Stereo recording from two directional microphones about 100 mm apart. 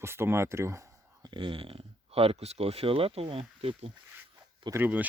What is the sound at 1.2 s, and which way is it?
Speech, 55° right (ahead or behind).